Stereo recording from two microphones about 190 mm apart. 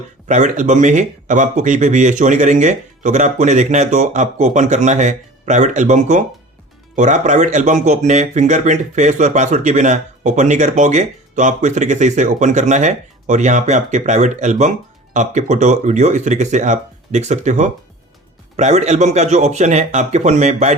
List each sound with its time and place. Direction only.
0.3 s speech: 40° right (ahead or behind)